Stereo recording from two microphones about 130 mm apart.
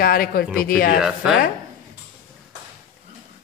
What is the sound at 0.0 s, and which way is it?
Speech, 90° left.